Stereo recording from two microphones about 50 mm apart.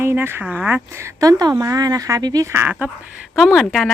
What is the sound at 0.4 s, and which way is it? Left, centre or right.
Speech, centre.